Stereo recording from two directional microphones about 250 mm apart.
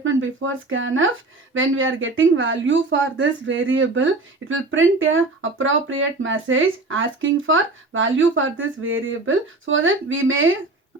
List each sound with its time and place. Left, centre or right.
0.0 s speech: right